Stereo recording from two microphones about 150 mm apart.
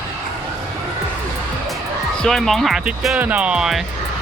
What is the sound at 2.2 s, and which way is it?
Speech, centre (ahead or behind).